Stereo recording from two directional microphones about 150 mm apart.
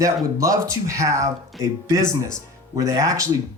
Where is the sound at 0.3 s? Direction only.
20° right (ahead or behind).